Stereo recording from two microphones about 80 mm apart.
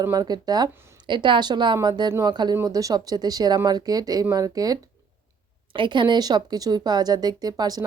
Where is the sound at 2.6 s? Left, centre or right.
Right.